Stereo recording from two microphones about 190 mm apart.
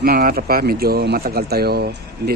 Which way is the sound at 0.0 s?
50° right (ahead or behind).